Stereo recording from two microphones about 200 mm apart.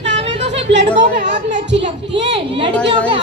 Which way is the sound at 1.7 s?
60° right (ahead or behind).